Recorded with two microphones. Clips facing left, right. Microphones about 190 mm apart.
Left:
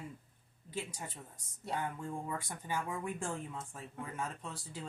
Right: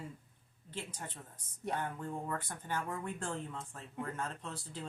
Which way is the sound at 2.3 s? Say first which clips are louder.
Even; 10° left (ahead or behind).